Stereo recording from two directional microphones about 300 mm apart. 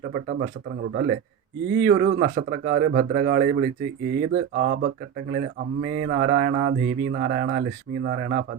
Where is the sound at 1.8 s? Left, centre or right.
Right.